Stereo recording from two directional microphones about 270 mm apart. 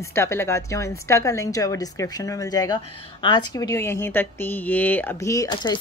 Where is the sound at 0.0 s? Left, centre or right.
Centre.